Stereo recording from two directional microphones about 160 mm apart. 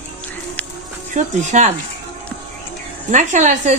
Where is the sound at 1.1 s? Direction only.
50° right (ahead or behind).